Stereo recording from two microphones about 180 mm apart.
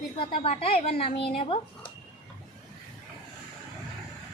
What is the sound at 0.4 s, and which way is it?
A woman's voice, 35° left (ahead or behind).